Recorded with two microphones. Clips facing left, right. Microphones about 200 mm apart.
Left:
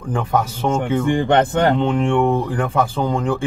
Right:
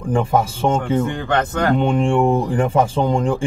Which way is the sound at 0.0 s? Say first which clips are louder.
Right 3 dB; 10° right (ahead or behind).